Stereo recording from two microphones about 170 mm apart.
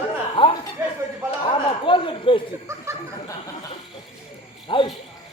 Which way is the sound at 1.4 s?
30° left (ahead or behind).